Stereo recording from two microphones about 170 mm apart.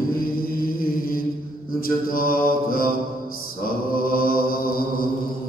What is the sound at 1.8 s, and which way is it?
Mantra, 60° left (ahead or behind).